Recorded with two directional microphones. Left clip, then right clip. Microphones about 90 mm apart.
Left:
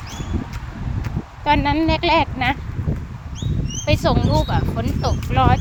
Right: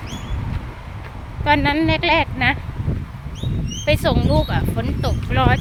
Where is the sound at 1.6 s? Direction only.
35° right (ahead or behind); by 2.6 s 20° right (ahead or behind).